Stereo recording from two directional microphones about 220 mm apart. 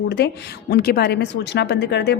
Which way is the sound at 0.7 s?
45° left (ahead or behind).